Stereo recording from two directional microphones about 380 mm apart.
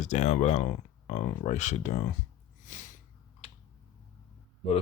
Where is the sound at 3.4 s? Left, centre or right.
Centre.